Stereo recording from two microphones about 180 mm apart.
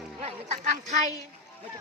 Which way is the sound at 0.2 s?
40° right (ahead or behind).